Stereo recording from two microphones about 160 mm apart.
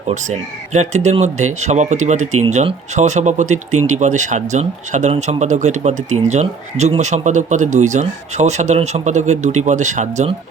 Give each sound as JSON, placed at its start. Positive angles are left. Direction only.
{"t": 0.1, "sound": "speech", "side_deg": -45}